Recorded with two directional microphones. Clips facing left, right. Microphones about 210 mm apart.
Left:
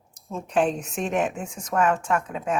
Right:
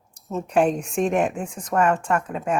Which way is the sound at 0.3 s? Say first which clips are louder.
Right 3 dB; 5° right (ahead or behind).